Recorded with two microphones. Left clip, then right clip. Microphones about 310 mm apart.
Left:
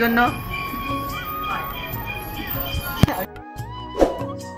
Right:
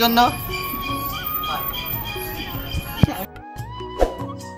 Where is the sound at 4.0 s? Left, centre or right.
Centre.